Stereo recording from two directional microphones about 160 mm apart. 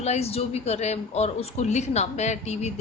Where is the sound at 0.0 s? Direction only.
40° left (ahead or behind).